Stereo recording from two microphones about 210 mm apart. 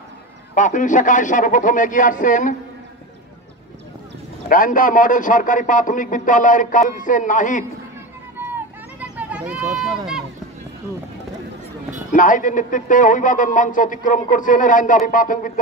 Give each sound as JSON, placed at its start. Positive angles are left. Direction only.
{"t": 0.6, "sound": "a man's voice", "side_deg": 35}
{"t": 4.5, "sound": "a man's voice", "side_deg": 40}
{"t": 9.1, "sound": "speech", "side_deg": -5}
{"t": 12.1, "sound": "a man's voice", "side_deg": 40}